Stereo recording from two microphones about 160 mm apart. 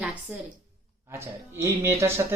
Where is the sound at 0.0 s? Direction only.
5° right (ahead or behind).